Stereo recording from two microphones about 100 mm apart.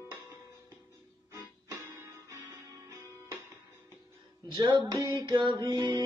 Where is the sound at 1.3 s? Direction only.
30° right (ahead or behind).